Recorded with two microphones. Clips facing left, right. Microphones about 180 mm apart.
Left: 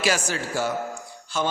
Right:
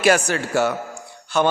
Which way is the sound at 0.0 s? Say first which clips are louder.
Right 7 dB; 60° right (ahead or behind).